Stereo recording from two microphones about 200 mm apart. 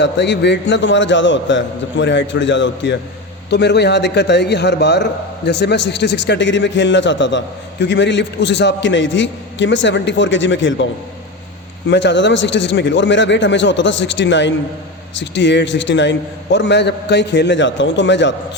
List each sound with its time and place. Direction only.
0.0 s a man's voice: 60° left (ahead or behind)
11.9 s a man's voice: 60° left (ahead or behind)